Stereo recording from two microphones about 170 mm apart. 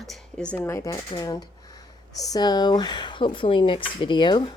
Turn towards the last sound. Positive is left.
turn(degrees=30)  # may be behind; listen again after turning